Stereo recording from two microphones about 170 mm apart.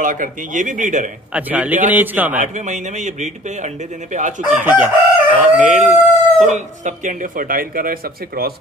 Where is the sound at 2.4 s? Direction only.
45° right (ahead or behind).